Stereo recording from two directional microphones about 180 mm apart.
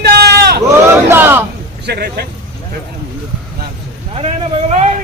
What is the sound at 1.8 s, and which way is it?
Speech, 60° right (ahead or behind).